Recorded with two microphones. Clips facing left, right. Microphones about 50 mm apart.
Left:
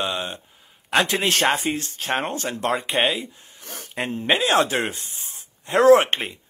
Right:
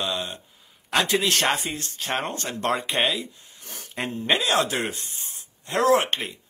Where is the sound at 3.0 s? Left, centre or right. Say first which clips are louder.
Left 2 dB; left.